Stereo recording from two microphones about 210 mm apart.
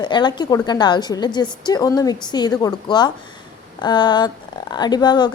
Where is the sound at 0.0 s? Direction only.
20° left (ahead or behind).